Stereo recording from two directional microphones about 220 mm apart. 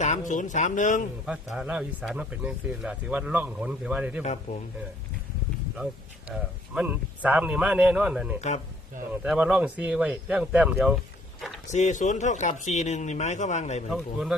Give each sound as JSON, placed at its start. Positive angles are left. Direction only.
{"t": 0.0, "sound": "speech", "side_deg": 35}
{"t": 1.3, "sound": "speech", "side_deg": -5}
{"t": 5.7, "sound": "speech", "side_deg": -5}
{"t": 8.4, "sound": "speech", "side_deg": 30}
{"t": 9.2, "sound": "speech", "side_deg": 0}
{"t": 11.7, "sound": "speech", "side_deg": 35}
{"t": 13.9, "sound": "speech", "side_deg": 0}